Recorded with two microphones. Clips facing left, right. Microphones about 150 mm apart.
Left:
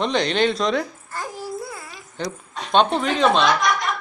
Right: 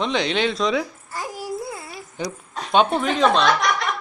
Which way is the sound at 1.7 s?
25° right (ahead or behind).